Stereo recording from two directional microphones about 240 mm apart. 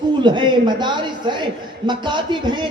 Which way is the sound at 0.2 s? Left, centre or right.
Centre.